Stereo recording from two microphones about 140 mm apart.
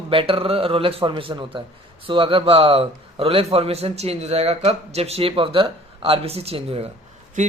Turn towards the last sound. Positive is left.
turn(degrees=-65)  # may be behind; listen again after turning